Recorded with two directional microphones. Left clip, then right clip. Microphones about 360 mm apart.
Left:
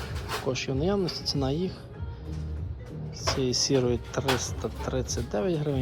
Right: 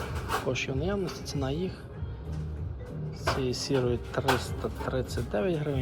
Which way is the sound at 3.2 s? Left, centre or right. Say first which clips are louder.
Left 3 dB; left.